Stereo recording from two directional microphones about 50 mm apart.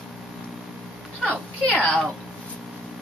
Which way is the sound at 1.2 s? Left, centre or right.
Left.